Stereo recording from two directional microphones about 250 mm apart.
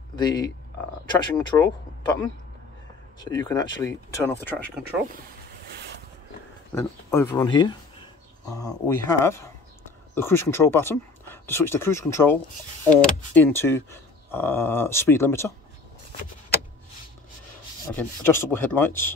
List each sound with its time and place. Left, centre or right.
0.1 s speech: centre
3.2 s speech: centre
6.7 s speech: centre
17.9 s speech: centre